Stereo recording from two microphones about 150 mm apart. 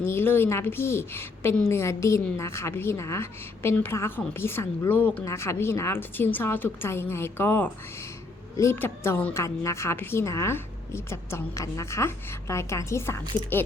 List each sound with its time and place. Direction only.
0.0 s a woman's voice: 15° left (ahead or behind)